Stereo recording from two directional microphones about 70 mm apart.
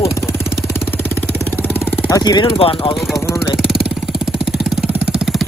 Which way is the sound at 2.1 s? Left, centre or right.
Left.